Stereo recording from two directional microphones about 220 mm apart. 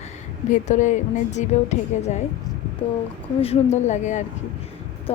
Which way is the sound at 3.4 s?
30° left (ahead or behind).